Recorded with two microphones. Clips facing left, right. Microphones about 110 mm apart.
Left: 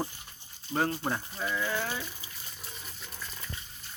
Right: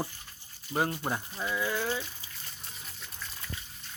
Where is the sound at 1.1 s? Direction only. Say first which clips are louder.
Left 1 dB; 10° right (ahead or behind).